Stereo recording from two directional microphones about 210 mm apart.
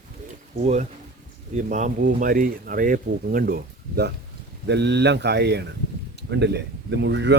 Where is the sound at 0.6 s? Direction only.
35° right (ahead or behind).